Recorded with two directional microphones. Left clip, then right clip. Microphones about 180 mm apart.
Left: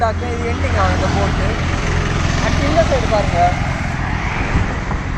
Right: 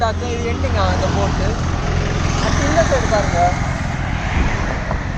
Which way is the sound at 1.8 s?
55° left (ahead or behind).